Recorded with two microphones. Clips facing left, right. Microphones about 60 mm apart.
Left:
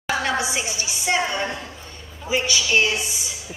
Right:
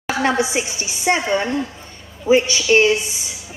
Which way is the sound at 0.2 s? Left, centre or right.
Right.